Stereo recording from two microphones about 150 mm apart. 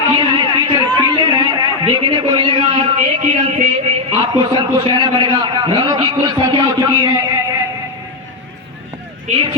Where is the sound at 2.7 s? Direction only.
50° right (ahead or behind).